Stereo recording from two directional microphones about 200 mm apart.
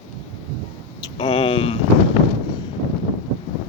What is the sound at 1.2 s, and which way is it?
Speech, 25° left (ahead or behind).